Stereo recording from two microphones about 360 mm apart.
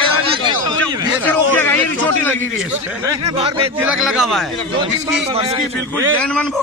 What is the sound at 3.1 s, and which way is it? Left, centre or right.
Speech, centre.